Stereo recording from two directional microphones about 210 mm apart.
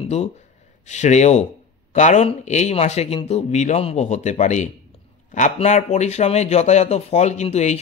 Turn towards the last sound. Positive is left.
turn(degrees=30)  # may be behind; listen again after turning